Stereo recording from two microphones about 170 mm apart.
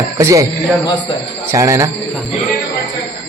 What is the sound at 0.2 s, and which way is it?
Speech, 20° right (ahead or behind).